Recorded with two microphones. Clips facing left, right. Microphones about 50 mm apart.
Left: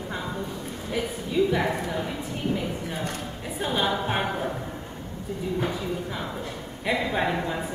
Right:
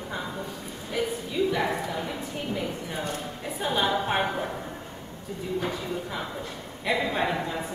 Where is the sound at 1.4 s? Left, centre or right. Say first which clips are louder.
Left 3 dB; centre.